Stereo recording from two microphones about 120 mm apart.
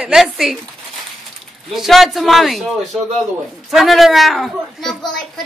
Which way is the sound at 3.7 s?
Centre (ahead or behind).